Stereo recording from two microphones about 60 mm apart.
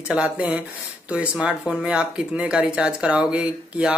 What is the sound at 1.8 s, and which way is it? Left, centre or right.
Speech, centre.